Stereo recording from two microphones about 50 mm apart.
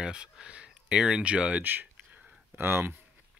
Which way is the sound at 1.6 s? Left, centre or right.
Right.